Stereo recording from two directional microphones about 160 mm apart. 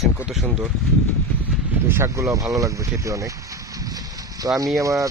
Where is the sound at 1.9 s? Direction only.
20° right (ahead or behind).